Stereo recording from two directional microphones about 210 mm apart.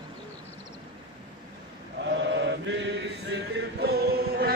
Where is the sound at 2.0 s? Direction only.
55° right (ahead or behind).